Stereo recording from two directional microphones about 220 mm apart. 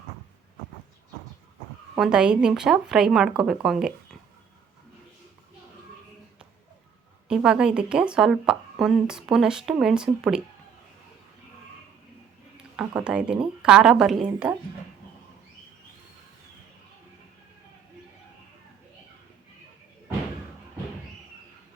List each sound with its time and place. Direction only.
2.0 s speech: 5° right (ahead or behind)
7.3 s speech: 5° right (ahead or behind)
12.7 s speech: 5° right (ahead or behind)